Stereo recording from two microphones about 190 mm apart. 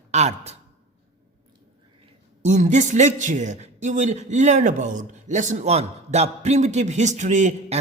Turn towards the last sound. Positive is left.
turn(degrees=-35)  # may be behind; listen again after turning